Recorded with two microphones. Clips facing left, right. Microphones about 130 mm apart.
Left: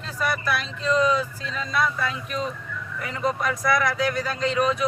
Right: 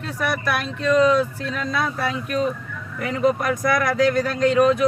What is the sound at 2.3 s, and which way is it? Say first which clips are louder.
Speech: right 6 dB; 50° right (ahead or behind).